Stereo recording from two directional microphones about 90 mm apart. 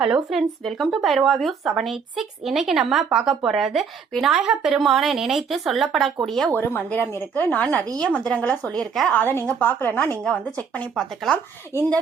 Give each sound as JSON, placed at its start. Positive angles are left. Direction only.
{"t": 0.0, "sound": "speech", "side_deg": -5}
{"t": 6.5, "sound": "speech", "side_deg": 25}
{"t": 9.1, "sound": "speech", "side_deg": 25}
{"t": 10.9, "sound": "speech", "side_deg": 5}